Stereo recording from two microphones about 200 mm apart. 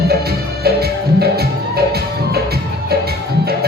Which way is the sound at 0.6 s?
50° right (ahead or behind).